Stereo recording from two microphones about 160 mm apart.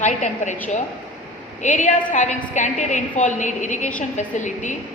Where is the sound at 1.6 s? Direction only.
50° left (ahead or behind).